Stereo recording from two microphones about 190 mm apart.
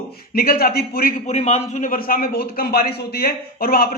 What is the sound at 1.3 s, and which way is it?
A man's voice, 35° left (ahead or behind).